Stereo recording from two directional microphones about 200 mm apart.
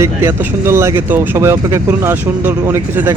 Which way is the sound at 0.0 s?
15° right (ahead or behind).